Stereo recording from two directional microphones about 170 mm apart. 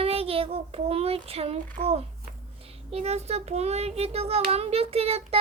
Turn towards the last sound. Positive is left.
turn(degrees=-35)  # may be behind; listen again after turning